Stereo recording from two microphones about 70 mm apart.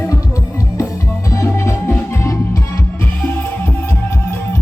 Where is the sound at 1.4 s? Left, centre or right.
Left.